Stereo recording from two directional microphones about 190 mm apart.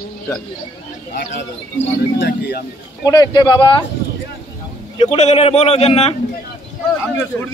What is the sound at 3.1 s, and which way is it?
Speech, 20° left (ahead or behind).